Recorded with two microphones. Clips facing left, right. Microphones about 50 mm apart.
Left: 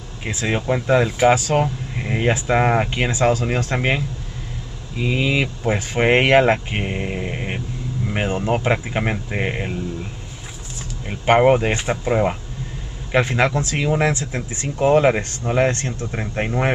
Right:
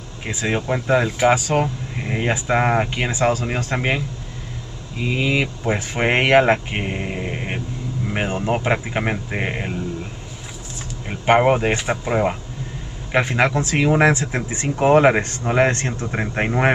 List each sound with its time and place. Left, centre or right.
0.5 s speech: centre
11.1 s a man's voice: centre